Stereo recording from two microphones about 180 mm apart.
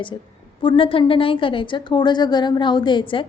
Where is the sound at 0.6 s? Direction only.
30° left (ahead or behind).